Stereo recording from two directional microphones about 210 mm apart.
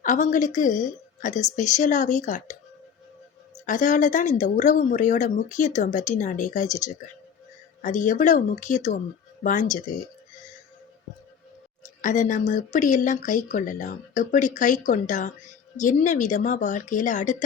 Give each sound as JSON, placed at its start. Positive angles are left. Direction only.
{"t": 0.0, "sound": "speech", "side_deg": 35}
{"t": 3.7, "sound": "speech", "side_deg": 40}
{"t": 7.8, "sound": "speech", "side_deg": 35}
{"t": 11.8, "sound": "speech", "side_deg": 35}